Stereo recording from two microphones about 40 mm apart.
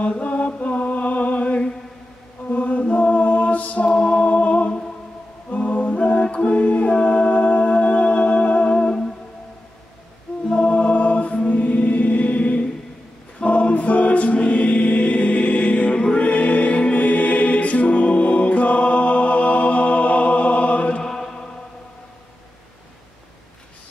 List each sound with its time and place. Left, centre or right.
0.1 s mantra: left
5.5 s a capella: left
10.5 s choir: left
21.0 s chant: centre